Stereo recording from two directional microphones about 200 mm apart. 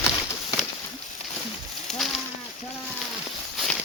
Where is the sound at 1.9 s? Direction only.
Centre (ahead or behind).